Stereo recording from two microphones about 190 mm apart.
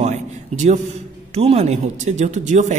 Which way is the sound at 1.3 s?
35° right (ahead or behind).